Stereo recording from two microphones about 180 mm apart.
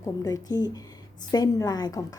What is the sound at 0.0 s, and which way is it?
A woman's voice, 20° left (ahead or behind).